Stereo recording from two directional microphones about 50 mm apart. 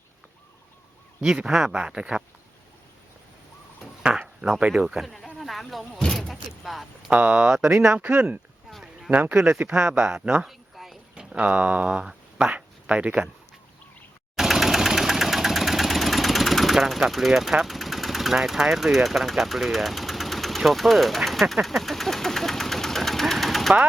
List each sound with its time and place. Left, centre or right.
1.5 s speech: centre
1.7 s speech: centre
4.1 s a sound: centre
4.7 s speech: centre
5.0 s a sound: centre
7.1 s speech: right
7.4 s speech: centre
7.9 s speech: right
9.6 s speech: right
10.4 s a sound: centre
11.1 s a sound: centre
11.4 s speech: right
14.3 s engine: centre